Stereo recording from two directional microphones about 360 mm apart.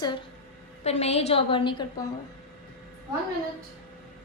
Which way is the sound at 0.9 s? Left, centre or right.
Centre.